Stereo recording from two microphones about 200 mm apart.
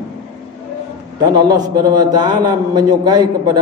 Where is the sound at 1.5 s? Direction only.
20° right (ahead or behind).